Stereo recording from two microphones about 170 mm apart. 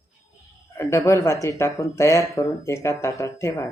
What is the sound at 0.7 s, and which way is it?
Speech, 15° left (ahead or behind).